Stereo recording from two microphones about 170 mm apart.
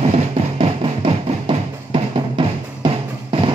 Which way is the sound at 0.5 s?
30° right (ahead or behind).